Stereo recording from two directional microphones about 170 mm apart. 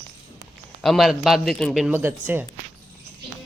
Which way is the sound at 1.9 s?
10° right (ahead or behind).